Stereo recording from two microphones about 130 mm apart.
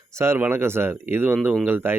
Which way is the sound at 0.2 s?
15° right (ahead or behind).